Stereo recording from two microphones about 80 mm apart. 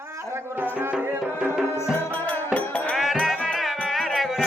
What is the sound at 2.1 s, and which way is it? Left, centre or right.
Music, centre.